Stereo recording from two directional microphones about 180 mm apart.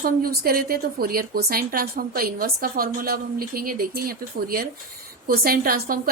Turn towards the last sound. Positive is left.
turn(degrees=-55)  # may be behind; listen again after turning